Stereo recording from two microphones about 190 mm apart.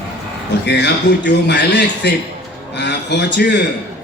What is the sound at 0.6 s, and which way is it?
A man's voice, 65° left (ahead or behind).